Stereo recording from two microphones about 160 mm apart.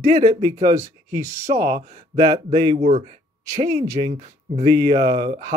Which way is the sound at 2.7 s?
45° right (ahead or behind).